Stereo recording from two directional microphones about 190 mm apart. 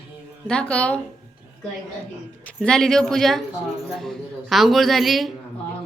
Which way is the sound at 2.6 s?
5° left (ahead or behind).